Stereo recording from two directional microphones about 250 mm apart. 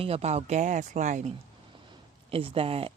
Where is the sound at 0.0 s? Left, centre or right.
Right.